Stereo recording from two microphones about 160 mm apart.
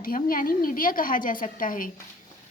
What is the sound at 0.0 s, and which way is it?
A woman's voice, 60° left (ahead or behind).